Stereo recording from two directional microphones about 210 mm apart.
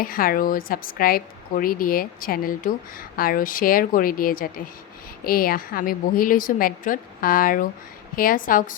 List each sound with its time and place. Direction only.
0.0 s a woman's voice: 45° left (ahead or behind)